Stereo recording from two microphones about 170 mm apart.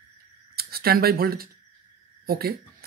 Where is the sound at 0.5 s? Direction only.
65° right (ahead or behind).